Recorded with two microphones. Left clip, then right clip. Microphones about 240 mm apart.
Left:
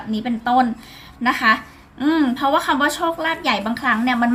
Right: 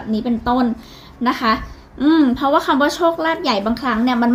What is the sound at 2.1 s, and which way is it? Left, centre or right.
A woman's voice, left.